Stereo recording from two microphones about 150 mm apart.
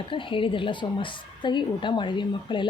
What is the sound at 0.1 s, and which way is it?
A woman's voice, 35° left (ahead or behind).